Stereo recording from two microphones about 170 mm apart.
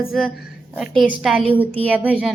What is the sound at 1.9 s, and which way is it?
Speech, 10° right (ahead or behind).